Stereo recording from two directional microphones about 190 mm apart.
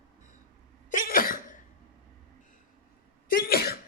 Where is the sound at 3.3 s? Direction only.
55° left (ahead or behind).